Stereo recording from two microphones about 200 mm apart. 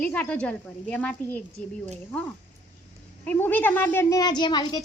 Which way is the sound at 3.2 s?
10° left (ahead or behind).